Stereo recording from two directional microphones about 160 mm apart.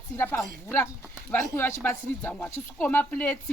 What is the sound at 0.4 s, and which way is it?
Speech, 15° left (ahead or behind).